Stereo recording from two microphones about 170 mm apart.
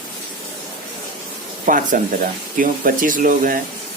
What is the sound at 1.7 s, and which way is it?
Speech, 55° right (ahead or behind).